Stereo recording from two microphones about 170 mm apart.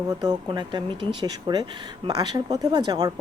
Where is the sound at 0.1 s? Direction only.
25° right (ahead or behind).